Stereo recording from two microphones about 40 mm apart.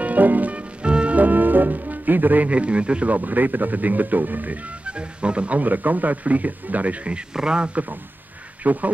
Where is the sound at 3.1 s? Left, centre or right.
Right.